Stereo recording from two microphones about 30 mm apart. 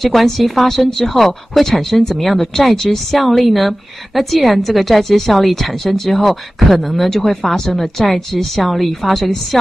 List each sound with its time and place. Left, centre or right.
0.0 s a woman's voice: centre
3.1 s a woman's voice: centre